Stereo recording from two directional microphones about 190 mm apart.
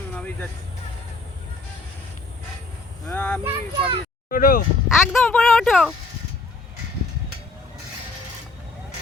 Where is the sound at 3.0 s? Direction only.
10° left (ahead or behind).